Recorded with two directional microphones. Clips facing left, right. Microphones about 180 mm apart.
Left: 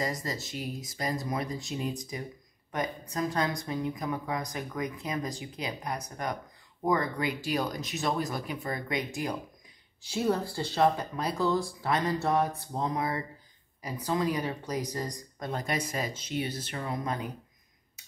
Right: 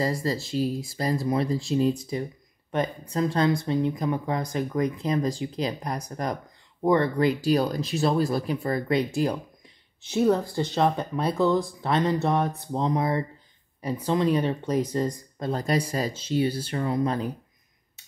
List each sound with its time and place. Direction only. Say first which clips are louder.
0.0 s speech: right 7 dB; 30° right (ahead or behind)
10.3 s speech: right 6 dB; 20° right (ahead or behind)